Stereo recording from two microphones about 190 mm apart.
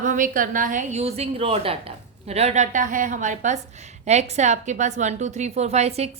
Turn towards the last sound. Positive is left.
turn(degrees=-35)  # may be behind; listen again after turning